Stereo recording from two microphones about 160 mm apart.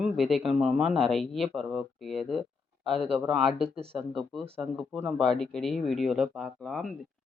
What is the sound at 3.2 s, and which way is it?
Speech, 40° right (ahead or behind).